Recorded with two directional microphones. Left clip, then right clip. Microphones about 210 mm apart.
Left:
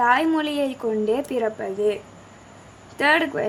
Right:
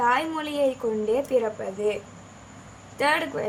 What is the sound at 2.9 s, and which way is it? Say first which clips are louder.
Speech: left 4 dB; 35° left (ahead or behind).